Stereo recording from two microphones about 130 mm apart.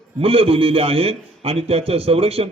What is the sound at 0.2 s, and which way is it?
A man's voice, 45° right (ahead or behind).